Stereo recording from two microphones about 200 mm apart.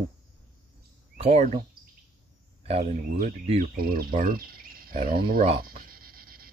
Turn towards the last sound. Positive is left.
turn(degrees=-45)  # may be behind; listen again after turning